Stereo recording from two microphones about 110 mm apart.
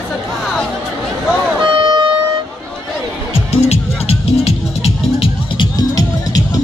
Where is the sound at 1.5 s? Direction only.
45° right (ahead or behind).